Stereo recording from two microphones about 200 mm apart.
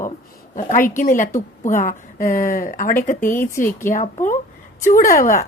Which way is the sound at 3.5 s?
15° left (ahead or behind).